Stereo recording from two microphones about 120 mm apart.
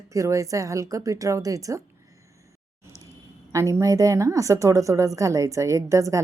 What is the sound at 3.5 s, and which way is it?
A woman's voice, 25° right (ahead or behind).